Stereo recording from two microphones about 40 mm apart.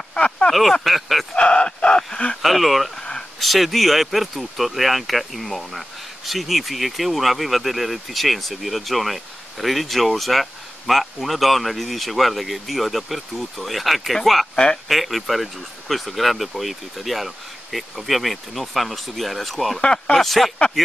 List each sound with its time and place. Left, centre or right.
0.1 s a sound: left
0.5 s speech: centre
1.3 s a sound: left
2.4 s speech: centre
3.0 s a sound: centre
3.3 s speech: centre
14.5 s speech: left
14.9 s speech: centre
19.8 s speech: left
20.2 s speech: centre